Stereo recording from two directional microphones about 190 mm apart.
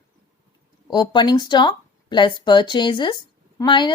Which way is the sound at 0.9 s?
25° left (ahead or behind).